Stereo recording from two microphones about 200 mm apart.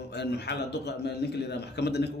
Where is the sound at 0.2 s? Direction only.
55° left (ahead or behind).